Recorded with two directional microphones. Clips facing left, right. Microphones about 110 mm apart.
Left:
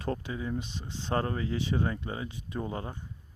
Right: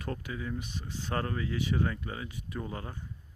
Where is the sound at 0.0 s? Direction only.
30° left (ahead or behind).